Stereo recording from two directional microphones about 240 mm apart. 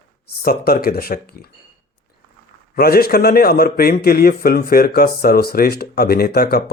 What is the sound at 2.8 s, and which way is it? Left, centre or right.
A man's voice, left.